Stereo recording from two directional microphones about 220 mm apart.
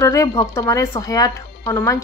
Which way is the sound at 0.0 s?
15° left (ahead or behind).